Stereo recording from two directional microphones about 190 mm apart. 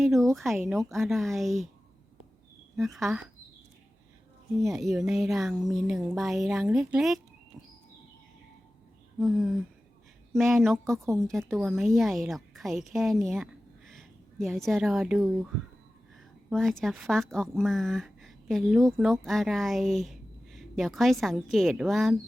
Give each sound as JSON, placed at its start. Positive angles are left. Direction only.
{"t": 0.0, "sound": "a sound", "side_deg": 0}
{"t": 0.3, "sound": "a woman's voice", "side_deg": 0}
{"t": 2.7, "sound": "a woman's voice", "side_deg": 0}
{"t": 4.6, "sound": "a woman's voice", "side_deg": 0}
{"t": 9.1, "sound": "a woman's voice", "side_deg": 0}
{"t": 10.9, "sound": "a woman's voice", "side_deg": -15}
{"t": 11.3, "sound": "a woman's voice", "side_deg": 0}
{"t": 16.5, "sound": "a woman's voice", "side_deg": 0}